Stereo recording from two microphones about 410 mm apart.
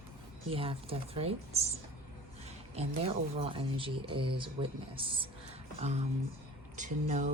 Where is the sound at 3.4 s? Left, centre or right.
Centre.